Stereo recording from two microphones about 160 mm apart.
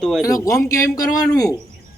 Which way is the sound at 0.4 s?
20° left (ahead or behind).